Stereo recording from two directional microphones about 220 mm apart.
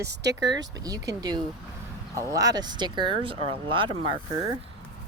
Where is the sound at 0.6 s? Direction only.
15° right (ahead or behind).